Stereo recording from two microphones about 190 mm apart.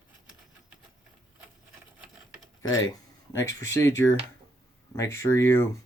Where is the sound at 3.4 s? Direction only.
20° left (ahead or behind).